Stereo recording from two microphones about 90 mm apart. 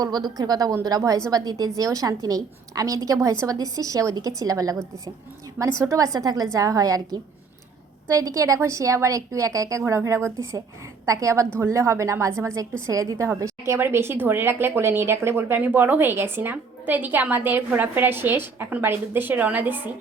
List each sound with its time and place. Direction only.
0.0 s a woman's voice: 45° right (ahead or behind); by 19.9 s 20° right (ahead or behind)